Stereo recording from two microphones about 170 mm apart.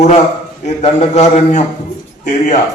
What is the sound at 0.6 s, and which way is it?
A man's voice, 40° left (ahead or behind).